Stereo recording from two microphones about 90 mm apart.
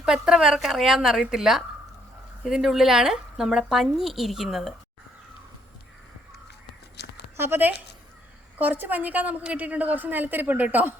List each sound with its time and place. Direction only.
0.0 s speech: 10° right (ahead or behind)
7.3 s a woman's voice: 25° right (ahead or behind)